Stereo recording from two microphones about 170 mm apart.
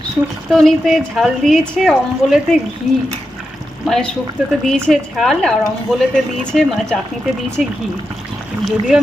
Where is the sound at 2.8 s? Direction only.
45° left (ahead or behind).